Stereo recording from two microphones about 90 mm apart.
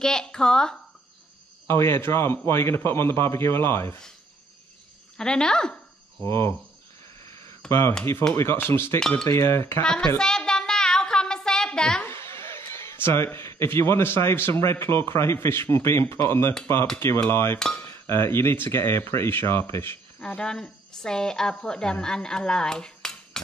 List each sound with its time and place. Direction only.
0.0 s speech: 5° left (ahead or behind)
1.7 s a man's voice: 25° left (ahead or behind)
5.1 s speech: 10° left (ahead or behind)
6.2 s a man's voice: 30° left (ahead or behind)
7.6 s speech: 10° left (ahead or behind)
8.4 s a man's voice: 25° left (ahead or behind)
9.8 s a sound: 10° left (ahead or behind)
12.0 s a sound: 30° left (ahead or behind)
14.6 s a man's voice: 30° left (ahead or behind)
20.2 s speech: 10° left (ahead or behind)